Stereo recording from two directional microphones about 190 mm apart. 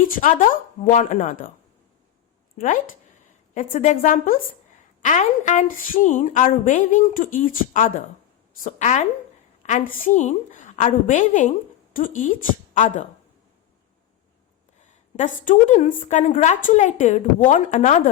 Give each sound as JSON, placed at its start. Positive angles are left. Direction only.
{"t": 0.0, "sound": "a woman's voice", "side_deg": 45}
{"t": 2.6, "sound": "a woman's voice", "side_deg": 45}
{"t": 14.8, "sound": "a woman's voice", "side_deg": 40}